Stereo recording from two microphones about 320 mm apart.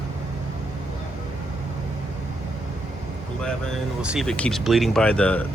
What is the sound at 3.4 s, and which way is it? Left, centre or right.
Speech, centre.